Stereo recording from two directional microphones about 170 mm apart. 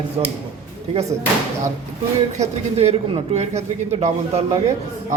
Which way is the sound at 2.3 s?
40° right (ahead or behind).